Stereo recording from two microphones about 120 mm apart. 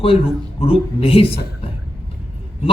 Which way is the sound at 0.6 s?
50° left (ahead or behind).